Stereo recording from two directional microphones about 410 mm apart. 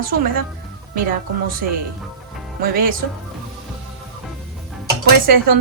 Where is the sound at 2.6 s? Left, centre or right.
Right.